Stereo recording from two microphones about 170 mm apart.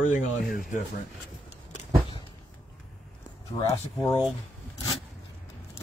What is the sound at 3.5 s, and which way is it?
Speech, 25° left (ahead or behind).